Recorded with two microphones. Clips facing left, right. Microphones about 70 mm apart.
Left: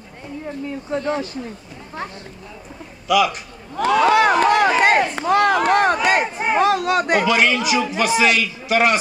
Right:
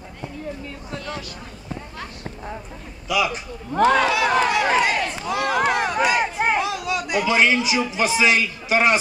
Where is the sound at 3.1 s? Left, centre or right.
Left.